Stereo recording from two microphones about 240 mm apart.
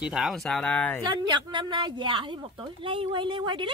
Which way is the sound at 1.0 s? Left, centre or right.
Centre.